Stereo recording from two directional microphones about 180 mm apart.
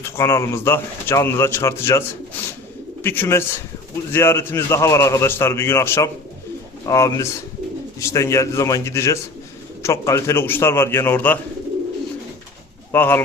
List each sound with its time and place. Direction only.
0.0 s speech: 15° left (ahead or behind)
12.9 s speech: 10° left (ahead or behind)